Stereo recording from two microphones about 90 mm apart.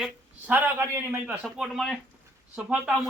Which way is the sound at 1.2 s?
15° right (ahead or behind).